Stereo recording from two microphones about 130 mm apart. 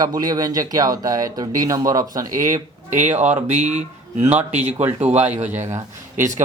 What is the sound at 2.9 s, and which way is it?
Speech, 65° right (ahead or behind).